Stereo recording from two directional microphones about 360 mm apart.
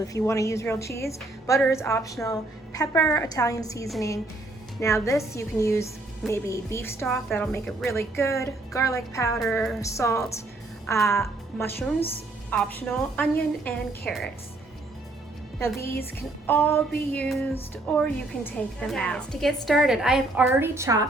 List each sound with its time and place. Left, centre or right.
0.0 s a woman's voice: centre
12.5 s a woman's voice: centre
15.5 s a woman's voice: centre